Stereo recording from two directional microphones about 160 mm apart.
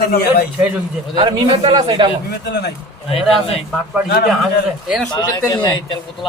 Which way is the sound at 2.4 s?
90° left.